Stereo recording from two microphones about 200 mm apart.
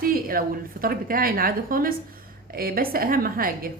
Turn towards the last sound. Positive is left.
turn(degrees=-45)  # may be behind; listen again after turning